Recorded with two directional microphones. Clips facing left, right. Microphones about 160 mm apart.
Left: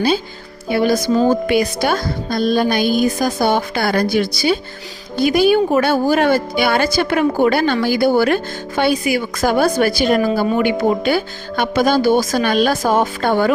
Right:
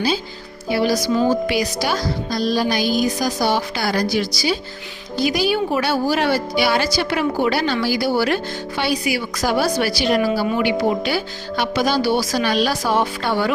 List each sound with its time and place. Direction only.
0.7 s a woman's voice: 50° left (ahead or behind)